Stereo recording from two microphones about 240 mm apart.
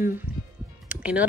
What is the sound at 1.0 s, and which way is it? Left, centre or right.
Music, centre.